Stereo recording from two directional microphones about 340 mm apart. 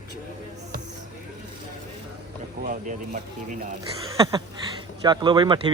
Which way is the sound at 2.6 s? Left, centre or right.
Right.